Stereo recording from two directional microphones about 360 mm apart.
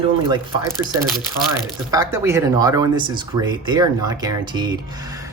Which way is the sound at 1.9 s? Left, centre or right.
Centre.